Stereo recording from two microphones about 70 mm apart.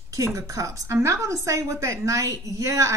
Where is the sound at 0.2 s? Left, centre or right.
Right.